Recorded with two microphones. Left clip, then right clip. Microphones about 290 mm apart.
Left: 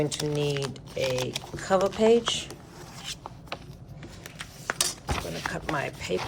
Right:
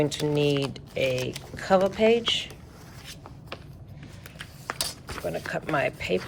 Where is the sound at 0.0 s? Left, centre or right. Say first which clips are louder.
Right 3 dB; centre.